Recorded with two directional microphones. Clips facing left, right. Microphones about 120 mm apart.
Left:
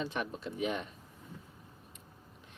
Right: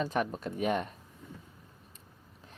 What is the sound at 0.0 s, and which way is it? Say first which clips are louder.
Speech: right 5 dB; 45° right (ahead or behind).